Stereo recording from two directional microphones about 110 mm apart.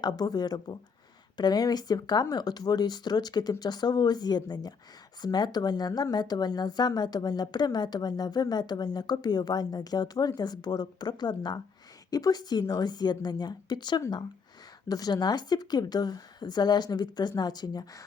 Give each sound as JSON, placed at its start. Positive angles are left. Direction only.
{"t": 0.0, "sound": "a woman's voice", "side_deg": 35}